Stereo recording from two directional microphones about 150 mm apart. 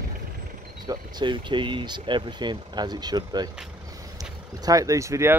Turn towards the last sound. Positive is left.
turn(degrees=-20)  # may be behind; listen again after turning